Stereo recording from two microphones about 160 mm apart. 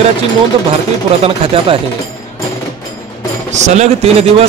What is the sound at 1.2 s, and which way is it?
Speech, 35° right (ahead or behind).